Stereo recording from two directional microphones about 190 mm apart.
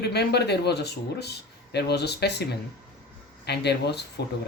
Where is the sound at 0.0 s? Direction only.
60° left (ahead or behind).